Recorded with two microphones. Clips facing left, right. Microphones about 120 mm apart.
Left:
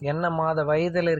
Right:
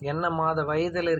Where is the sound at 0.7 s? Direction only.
5° right (ahead or behind).